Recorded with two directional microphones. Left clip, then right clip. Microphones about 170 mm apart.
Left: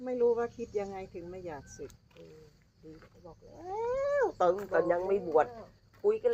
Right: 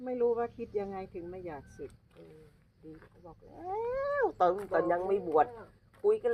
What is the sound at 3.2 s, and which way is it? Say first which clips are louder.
Speech: right 2 dB; 45° right (ahead or behind).